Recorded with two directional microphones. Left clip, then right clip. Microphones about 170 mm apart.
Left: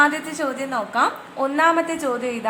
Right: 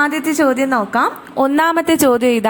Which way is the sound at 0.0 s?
40° right (ahead or behind).